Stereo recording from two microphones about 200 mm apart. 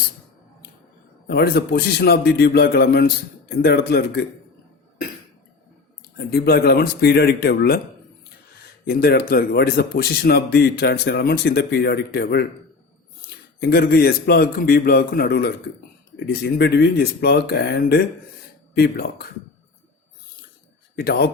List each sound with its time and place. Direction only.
1.3 s speech: 50° left (ahead or behind)
6.0 s speech: 55° left (ahead or behind)
8.8 s speech: 50° left (ahead or behind)
13.6 s speech: 50° left (ahead or behind)
21.0 s speech: 50° left (ahead or behind)